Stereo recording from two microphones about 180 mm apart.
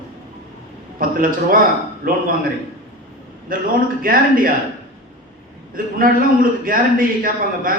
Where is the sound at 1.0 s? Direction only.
50° right (ahead or behind).